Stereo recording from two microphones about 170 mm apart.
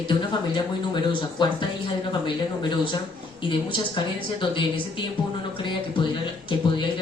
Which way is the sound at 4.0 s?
25° left (ahead or behind).